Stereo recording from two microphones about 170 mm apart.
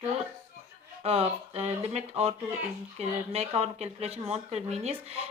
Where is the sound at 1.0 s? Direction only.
35° right (ahead or behind).